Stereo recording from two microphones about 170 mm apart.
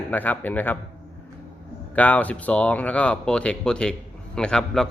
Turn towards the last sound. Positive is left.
turn(degrees=5)  # may be behind; listen again after turning